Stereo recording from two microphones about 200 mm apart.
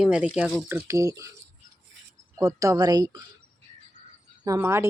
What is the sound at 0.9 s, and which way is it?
Speech, 15° right (ahead or behind).